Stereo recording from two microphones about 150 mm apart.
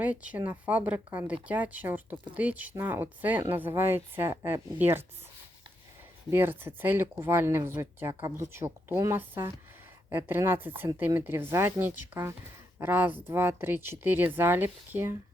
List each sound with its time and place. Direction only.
0.0 s speech: 10° right (ahead or behind)
6.3 s speech: 15° right (ahead or behind)